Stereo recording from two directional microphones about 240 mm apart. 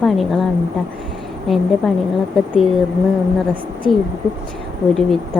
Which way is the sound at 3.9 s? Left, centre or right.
Centre.